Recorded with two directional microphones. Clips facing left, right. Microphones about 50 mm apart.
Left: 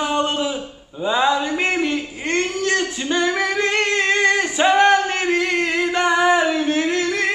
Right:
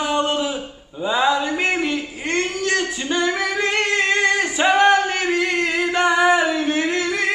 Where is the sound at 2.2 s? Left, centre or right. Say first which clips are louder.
Left 1 dB; centre.